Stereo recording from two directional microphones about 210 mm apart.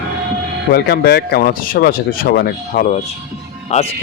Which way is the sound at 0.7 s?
50° left (ahead or behind).